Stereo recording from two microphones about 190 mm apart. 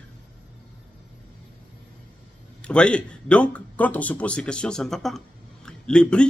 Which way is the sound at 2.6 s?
5° left (ahead or behind).